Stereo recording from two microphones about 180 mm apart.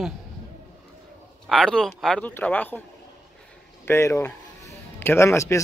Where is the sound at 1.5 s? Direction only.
5° left (ahead or behind).